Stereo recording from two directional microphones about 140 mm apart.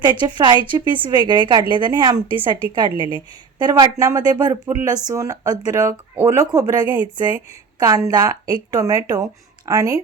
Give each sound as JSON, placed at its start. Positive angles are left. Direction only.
{"t": 0.0, "sound": "a woman's voice", "side_deg": -35}
{"t": 3.6, "sound": "a woman's voice", "side_deg": -30}